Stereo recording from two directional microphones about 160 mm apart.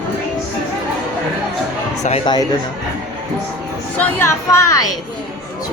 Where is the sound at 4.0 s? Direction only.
15° left (ahead or behind).